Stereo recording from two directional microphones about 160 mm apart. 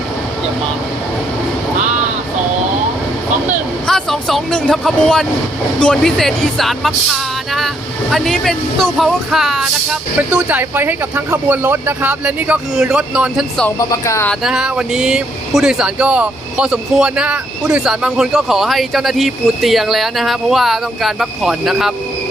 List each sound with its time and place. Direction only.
3.8 s speech: 5° left (ahead or behind)
13.7 s speech: 20° left (ahead or behind)
14.3 s speech: 5° right (ahead or behind)